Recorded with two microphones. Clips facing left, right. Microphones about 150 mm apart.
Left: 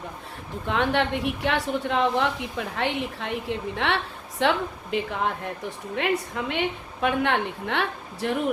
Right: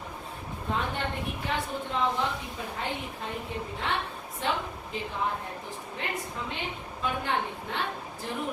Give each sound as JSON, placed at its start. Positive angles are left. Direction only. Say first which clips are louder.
{"t": 0.7, "sound": "a woman's voice", "louder": "left 8 dB", "side_deg": 80}